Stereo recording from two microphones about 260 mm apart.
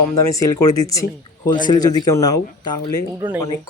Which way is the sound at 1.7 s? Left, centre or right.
Centre.